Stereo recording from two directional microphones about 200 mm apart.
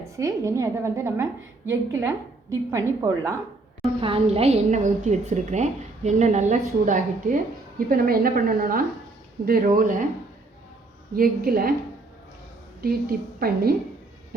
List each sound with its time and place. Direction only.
0.0 s a woman's voice: 15° right (ahead or behind)
4.0 s a woman's voice: 30° right (ahead or behind)
11.1 s a woman's voice: 45° right (ahead or behind)
12.8 s a woman's voice: 50° right (ahead or behind)